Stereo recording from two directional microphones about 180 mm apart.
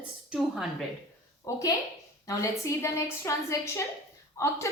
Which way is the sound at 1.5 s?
15° left (ahead or behind).